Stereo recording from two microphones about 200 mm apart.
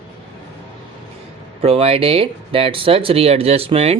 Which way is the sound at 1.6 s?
30° right (ahead or behind).